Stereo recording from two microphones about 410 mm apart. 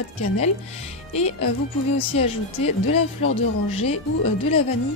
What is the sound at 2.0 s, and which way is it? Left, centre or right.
Speech, centre.